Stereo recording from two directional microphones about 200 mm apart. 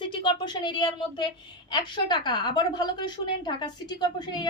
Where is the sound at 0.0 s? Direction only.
25° left (ahead or behind).